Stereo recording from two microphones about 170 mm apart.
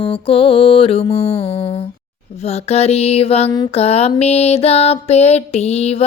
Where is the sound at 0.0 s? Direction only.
30° left (ahead or behind).